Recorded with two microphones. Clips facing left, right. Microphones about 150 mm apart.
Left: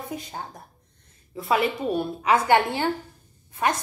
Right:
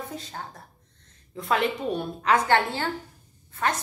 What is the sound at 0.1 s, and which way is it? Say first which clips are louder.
A woman's voice: left 3 dB; 15° left (ahead or behind).